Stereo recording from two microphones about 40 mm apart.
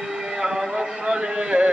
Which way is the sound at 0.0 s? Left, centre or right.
Centre.